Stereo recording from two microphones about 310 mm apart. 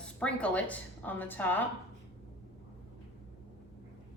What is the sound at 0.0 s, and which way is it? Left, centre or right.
A woman's voice, centre.